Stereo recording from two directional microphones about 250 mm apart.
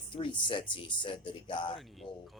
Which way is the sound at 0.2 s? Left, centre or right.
Centre.